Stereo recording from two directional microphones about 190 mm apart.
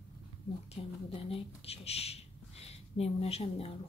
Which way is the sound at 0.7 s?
30° left (ahead or behind).